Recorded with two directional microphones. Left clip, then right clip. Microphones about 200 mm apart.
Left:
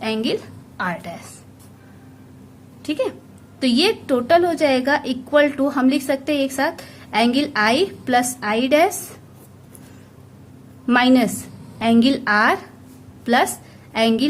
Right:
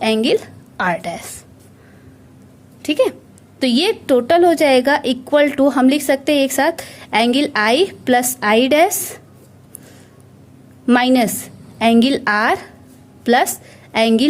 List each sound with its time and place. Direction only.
0.0 s a woman's voice: 35° right (ahead or behind)
2.8 s a woman's voice: 35° right (ahead or behind)
10.8 s a woman's voice: 35° right (ahead or behind)